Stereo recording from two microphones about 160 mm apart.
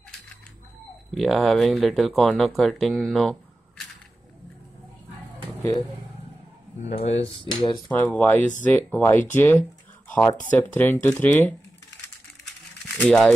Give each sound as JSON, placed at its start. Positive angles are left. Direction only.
{"t": 1.1, "sound": "speech", "side_deg": 0}
{"t": 5.6, "sound": "speech", "side_deg": 20}
{"t": 6.9, "sound": "speech", "side_deg": 40}
{"t": 7.9, "sound": "speech", "side_deg": 10}
{"t": 9.3, "sound": "a sound", "side_deg": 10}
{"t": 10.2, "sound": "speech", "side_deg": 10}
{"t": 12.9, "sound": "speech", "side_deg": 10}